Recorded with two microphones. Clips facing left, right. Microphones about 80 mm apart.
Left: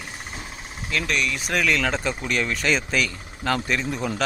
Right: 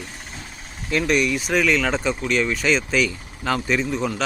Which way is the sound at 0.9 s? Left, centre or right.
Centre.